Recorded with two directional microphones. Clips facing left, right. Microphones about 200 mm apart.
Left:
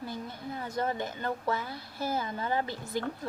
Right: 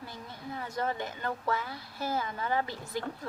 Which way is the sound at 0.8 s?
25° left (ahead or behind).